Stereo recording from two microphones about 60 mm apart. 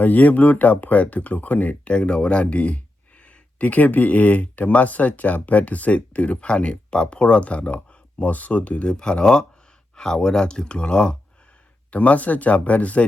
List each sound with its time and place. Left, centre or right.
0.0 s speech: left